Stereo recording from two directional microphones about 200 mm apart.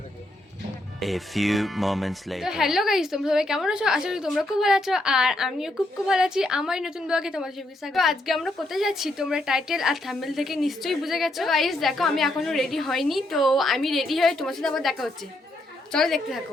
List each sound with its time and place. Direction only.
0.9 s speech: centre (ahead or behind)